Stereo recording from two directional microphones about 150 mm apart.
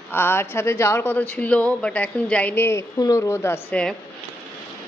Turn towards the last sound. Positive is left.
turn(degrees=10)  # may be behind; listen again after turning